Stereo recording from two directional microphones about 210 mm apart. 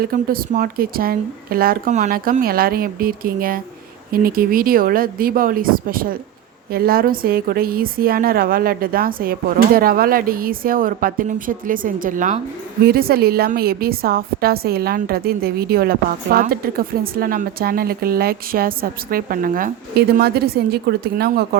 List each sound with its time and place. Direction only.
0.0 s a woman's voice: 45° right (ahead or behind)